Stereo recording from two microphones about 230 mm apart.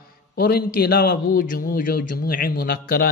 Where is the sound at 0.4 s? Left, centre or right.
Left.